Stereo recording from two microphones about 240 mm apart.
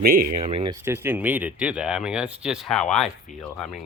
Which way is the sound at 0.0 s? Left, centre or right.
Right.